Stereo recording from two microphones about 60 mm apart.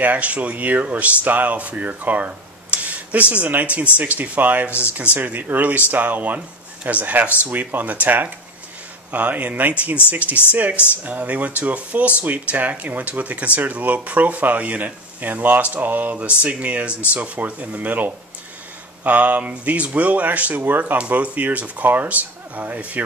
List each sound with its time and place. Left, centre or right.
0.0 s speech: right